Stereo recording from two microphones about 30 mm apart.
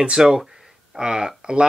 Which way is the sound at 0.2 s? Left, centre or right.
Right.